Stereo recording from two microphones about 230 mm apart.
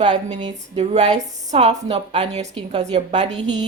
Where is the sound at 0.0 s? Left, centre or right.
Right.